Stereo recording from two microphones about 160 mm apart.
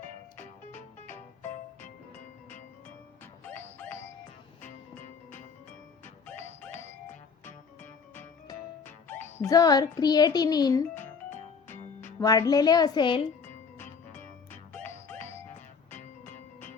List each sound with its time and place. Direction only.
0.3 s music: 15° left (ahead or behind)
3.4 s music: 10° left (ahead or behind)
6.2 s music: 15° left (ahead or behind)
9.0 s a child's voice: 15° left (ahead or behind)
14.1 s music: 10° left (ahead or behind)